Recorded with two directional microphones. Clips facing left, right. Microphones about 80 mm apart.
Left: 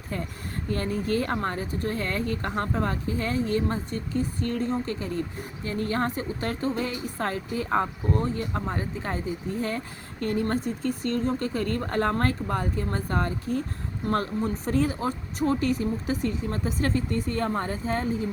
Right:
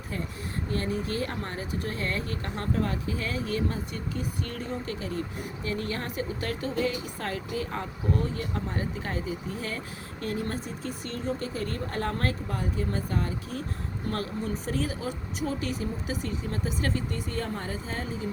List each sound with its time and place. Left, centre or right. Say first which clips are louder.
0.8 s speech: left 4 dB; left
10.8 s speech: left 5 dB; left
14.1 s speech: left 5 dB; left